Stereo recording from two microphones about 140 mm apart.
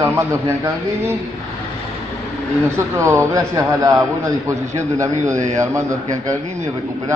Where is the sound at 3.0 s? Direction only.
20° right (ahead or behind).